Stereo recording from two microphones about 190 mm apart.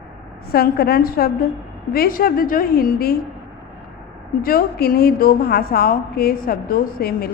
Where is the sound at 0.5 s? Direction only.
55° left (ahead or behind).